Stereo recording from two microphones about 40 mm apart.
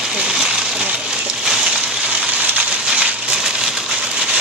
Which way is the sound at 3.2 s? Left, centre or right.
Centre.